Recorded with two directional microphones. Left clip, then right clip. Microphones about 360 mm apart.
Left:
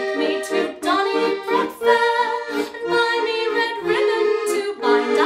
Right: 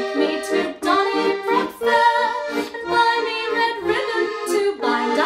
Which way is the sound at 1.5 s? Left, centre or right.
Centre.